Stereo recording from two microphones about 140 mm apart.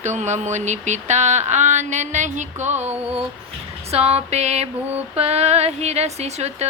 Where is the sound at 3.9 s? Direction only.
50° right (ahead or behind).